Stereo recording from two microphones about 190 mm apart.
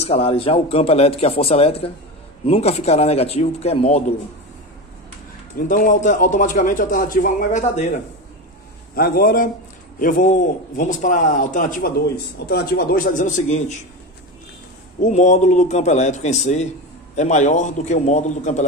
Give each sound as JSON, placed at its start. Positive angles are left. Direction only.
{"t": 0.0, "sound": "a man's voice", "side_deg": 30}
{"t": 5.7, "sound": "a man's voice", "side_deg": 45}
{"t": 8.9, "sound": "a man's voice", "side_deg": 50}
{"t": 12.4, "sound": "a man's voice", "side_deg": 55}
{"t": 15.0, "sound": "a man's voice", "side_deg": 40}